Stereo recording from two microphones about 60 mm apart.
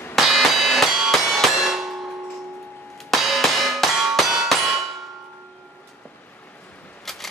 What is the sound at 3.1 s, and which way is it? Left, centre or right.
Music, centre.